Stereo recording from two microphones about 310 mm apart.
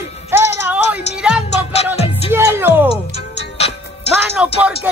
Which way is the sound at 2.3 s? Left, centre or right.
Centre.